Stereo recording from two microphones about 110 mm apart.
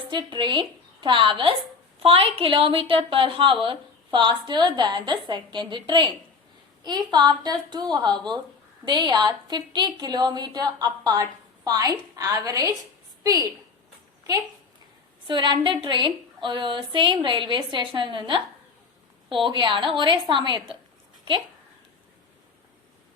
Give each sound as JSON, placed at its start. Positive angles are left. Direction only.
{"t": 0.1, "sound": "a woman's voice", "side_deg": -45}
{"t": 15.3, "sound": "a woman's voice", "side_deg": -45}